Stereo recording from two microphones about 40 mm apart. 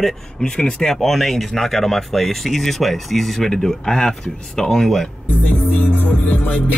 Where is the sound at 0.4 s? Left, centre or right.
Left.